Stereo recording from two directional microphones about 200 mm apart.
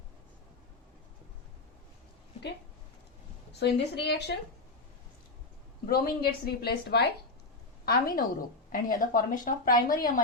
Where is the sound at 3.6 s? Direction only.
55° left (ahead or behind).